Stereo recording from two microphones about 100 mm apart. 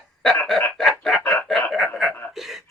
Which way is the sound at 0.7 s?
Centre (ahead or behind).